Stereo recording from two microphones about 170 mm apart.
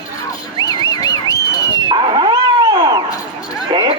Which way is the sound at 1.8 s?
30° right (ahead or behind).